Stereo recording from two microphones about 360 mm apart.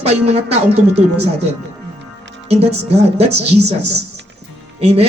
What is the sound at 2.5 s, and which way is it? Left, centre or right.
Speech, centre.